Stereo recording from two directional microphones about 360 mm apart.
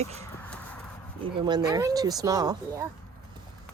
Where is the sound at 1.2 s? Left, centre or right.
Centre.